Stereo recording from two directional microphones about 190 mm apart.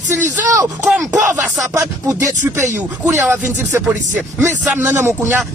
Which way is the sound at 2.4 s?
10° right (ahead or behind).